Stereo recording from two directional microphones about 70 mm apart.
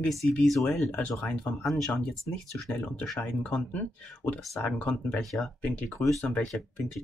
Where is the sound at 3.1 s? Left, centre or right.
Centre.